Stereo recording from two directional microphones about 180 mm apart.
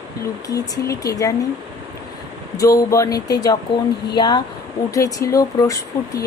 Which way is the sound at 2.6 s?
20° left (ahead or behind).